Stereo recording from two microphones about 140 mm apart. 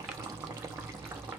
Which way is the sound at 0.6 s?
20° right (ahead or behind).